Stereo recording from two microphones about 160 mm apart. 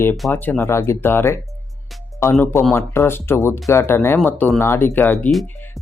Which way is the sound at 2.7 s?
15° left (ahead or behind).